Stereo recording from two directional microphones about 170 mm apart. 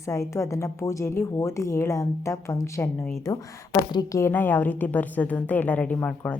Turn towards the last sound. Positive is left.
turn(degrees=5)  # may be behind; listen again after turning